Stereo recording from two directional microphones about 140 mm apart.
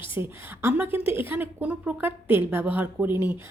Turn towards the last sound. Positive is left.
turn(degrees=-10)  # may be behind; listen again after turning